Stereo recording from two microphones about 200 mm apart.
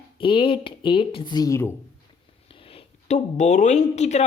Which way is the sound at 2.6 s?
30° left (ahead or behind).